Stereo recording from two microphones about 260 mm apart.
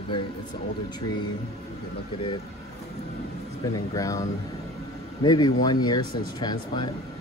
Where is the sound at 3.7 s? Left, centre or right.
Centre.